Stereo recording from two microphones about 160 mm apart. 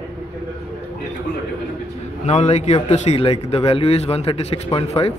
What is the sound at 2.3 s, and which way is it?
A man's voice, 45° left (ahead or behind).